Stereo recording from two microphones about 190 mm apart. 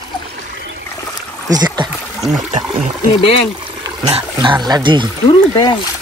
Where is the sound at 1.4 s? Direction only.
20° right (ahead or behind).